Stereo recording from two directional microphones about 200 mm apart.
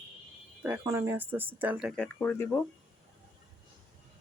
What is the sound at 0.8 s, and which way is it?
Speech, 15° right (ahead or behind).